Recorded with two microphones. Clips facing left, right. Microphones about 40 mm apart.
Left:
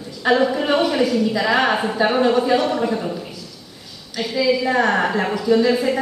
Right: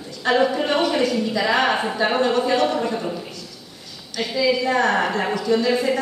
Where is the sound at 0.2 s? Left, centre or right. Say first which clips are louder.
Left 2 dB; centre.